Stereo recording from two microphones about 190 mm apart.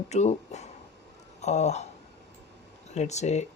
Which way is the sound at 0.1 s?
35° left (ahead or behind).